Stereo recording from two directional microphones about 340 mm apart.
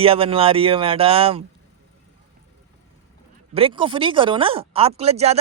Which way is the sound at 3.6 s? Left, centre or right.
Centre.